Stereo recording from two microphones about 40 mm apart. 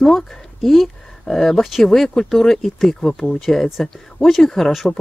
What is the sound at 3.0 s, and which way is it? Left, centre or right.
Speech, centre.